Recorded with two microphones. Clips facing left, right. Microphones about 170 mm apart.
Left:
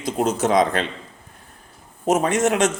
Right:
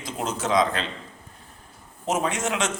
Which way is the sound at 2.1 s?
45° left (ahead or behind).